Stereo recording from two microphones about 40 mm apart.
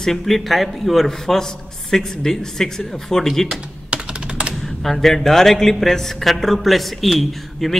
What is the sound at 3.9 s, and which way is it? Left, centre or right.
Computer keyboard, right.